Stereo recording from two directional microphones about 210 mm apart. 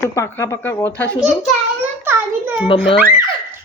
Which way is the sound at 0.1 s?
15° left (ahead or behind).